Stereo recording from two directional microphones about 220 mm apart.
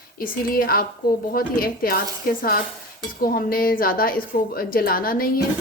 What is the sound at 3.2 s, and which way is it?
A woman's voice, 40° left (ahead or behind).